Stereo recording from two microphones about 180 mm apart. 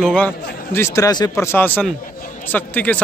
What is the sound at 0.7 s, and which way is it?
A man's voice, 15° left (ahead or behind).